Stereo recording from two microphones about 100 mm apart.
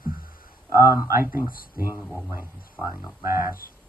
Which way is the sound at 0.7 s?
25° right (ahead or behind).